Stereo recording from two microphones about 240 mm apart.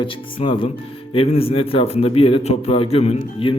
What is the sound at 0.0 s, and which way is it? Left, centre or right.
A man's voice, left.